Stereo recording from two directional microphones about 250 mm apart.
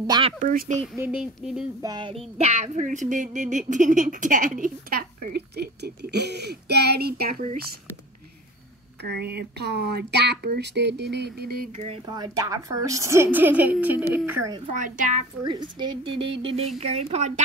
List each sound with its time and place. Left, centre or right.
0.0 s a woman's voice: centre
0.4 s speech: right
0.9 s a sound: centre
1.8 s a woman's voice: centre; by 7.6 s right
9.1 s speech: right
11.7 s a woman's voice: right
14.7 s speech: right
15.4 s speech: centre